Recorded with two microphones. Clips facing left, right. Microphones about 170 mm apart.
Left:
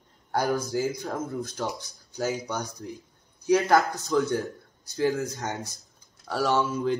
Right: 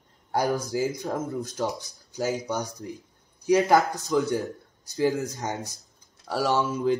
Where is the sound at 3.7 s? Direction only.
15° right (ahead or behind).